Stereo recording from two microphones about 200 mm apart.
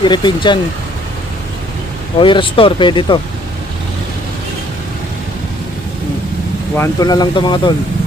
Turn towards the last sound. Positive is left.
turn(degrees=25)  # may be behind; listen again after turning